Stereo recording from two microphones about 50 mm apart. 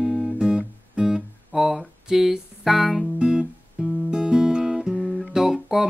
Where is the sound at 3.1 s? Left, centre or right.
Centre.